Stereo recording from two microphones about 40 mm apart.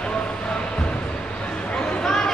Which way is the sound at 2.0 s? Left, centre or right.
Centre.